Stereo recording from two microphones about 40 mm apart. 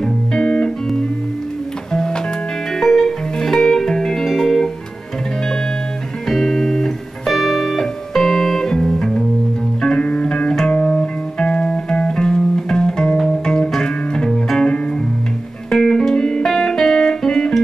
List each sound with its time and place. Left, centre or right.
0.0 s music: centre
1.9 s music: centre
6.2 s music: centre
15.7 s music: centre